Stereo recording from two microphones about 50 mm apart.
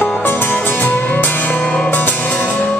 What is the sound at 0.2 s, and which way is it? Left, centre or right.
Music, left.